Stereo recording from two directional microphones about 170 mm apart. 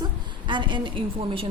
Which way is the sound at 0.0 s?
25° right (ahead or behind).